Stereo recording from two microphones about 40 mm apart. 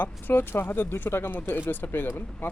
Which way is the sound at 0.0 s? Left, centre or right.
Left.